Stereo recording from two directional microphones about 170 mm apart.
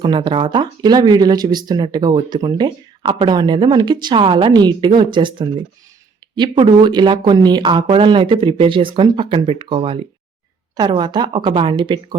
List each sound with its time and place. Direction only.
0.0 s speech: 25° right (ahead or behind)